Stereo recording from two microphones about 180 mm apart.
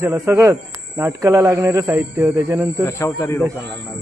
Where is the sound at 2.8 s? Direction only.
15° left (ahead or behind).